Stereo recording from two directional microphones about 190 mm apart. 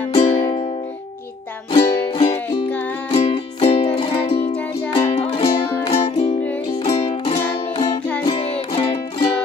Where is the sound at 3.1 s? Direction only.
30° left (ahead or behind).